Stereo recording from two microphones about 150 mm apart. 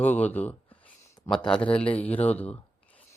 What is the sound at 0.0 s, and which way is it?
Speech, 10° left (ahead or behind).